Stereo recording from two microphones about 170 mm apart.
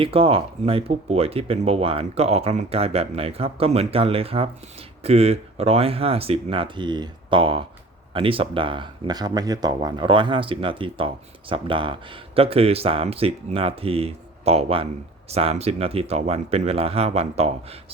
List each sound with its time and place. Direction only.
0.0 s speech: 35° right (ahead or behind)